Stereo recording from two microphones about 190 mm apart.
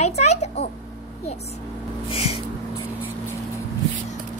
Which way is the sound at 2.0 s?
30° left (ahead or behind).